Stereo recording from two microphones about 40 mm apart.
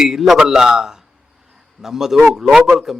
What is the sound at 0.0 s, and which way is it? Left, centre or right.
Speech, centre.